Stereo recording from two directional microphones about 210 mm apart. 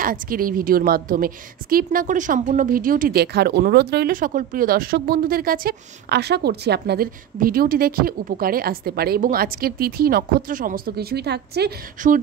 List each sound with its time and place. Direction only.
0.0 s a woman's voice: 40° right (ahead or behind)